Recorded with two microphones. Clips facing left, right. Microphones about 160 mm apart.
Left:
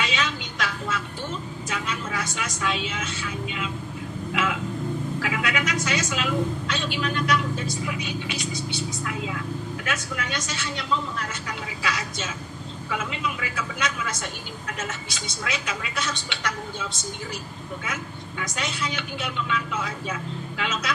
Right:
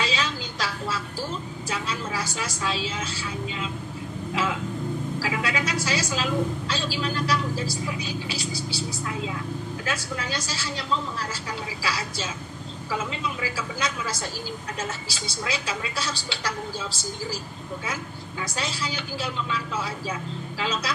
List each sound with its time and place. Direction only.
0.0 s a sound: 35° right (ahead or behind)
1.7 s a woman's voice: 30° right (ahead or behind)
5.2 s a woman's voice: 30° right (ahead or behind)